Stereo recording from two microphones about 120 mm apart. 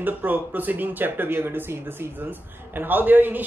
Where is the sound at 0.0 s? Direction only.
15° right (ahead or behind).